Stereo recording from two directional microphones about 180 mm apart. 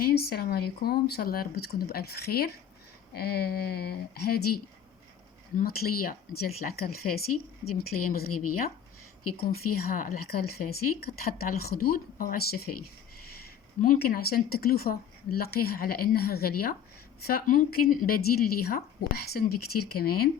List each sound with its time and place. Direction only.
0.0 s speech: 60° left (ahead or behind)